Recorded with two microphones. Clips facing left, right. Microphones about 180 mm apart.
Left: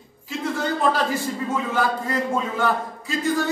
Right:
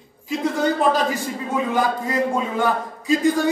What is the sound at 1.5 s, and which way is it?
A man's voice, 15° right (ahead or behind).